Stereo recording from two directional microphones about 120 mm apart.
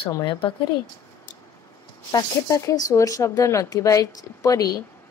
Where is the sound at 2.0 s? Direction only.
30° left (ahead or behind).